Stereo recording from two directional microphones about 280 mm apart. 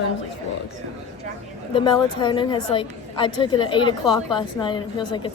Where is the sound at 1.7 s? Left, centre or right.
Centre.